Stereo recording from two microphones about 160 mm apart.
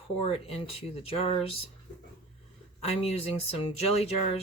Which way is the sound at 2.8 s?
40° left (ahead or behind).